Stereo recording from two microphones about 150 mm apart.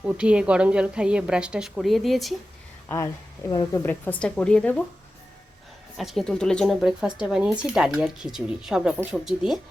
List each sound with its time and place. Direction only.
0.0 s a woman's voice: 5° right (ahead or behind)
3.5 s a woman's voice: 30° left (ahead or behind)
3.8 s a woman's voice: 10° left (ahead or behind)
6.0 s speech: centre (ahead or behind)